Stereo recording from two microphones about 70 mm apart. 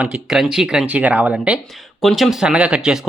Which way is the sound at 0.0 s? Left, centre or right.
Centre.